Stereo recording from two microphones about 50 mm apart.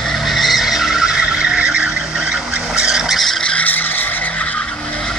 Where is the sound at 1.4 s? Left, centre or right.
Centre.